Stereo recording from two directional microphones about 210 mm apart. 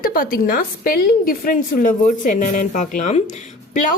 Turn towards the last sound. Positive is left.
turn(degrees=35)  # may be behind; listen again after turning